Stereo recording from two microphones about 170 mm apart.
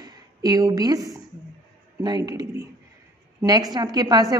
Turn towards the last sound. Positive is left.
turn(degrees=-20)  # may be behind; listen again after turning